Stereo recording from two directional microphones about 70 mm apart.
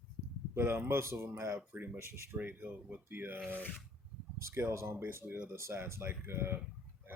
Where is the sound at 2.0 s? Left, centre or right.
Right.